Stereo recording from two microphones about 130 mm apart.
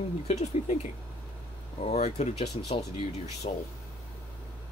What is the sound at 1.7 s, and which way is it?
Speech, 55° left (ahead or behind).